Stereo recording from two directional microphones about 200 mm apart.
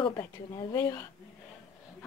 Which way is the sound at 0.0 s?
25° left (ahead or behind).